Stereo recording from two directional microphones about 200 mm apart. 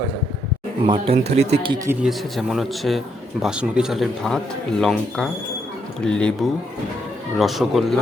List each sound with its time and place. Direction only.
0.9 s speech: 30° right (ahead or behind)
2.0 s speech: centre (ahead or behind)